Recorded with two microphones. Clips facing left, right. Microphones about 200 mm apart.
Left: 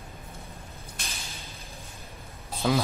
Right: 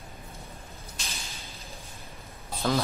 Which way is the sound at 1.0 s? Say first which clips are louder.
Left 1 dB; 55° left (ahead or behind).